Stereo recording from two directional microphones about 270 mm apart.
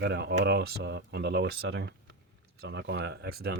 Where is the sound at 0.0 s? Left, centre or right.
Right.